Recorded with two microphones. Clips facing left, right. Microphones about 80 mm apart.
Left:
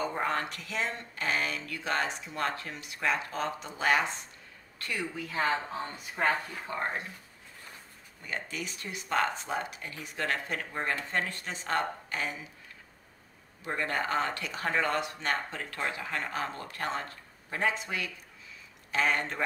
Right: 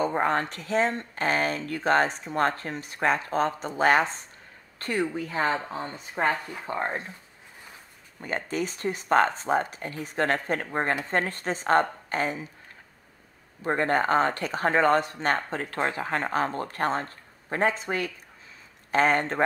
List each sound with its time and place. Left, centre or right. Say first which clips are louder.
0.0 s speech: right 6 dB; right
8.2 s speech: right 8 dB; right
13.7 s speech: right 8 dB; right